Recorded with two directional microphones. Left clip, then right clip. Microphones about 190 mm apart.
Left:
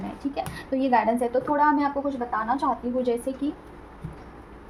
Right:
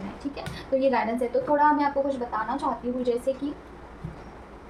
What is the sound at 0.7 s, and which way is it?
Speech, 45° left (ahead or behind).